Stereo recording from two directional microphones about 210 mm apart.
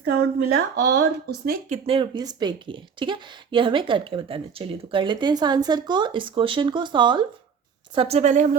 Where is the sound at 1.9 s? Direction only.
20° right (ahead or behind).